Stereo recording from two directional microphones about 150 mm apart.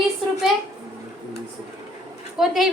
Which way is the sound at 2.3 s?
Centre (ahead or behind).